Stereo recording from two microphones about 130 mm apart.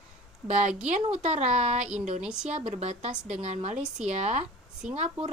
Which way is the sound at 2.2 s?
5° right (ahead or behind).